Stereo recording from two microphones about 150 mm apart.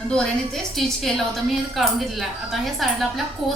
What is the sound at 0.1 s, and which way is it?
A woman's voice, 5° left (ahead or behind).